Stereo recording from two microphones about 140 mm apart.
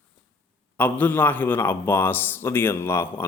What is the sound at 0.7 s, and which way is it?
A man's voice, 15° left (ahead or behind).